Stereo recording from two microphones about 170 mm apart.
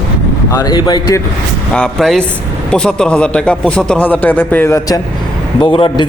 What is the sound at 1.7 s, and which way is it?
A man's voice, 5° left (ahead or behind).